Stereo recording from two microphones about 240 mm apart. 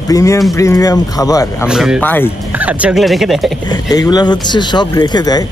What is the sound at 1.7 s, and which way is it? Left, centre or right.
Speech, centre.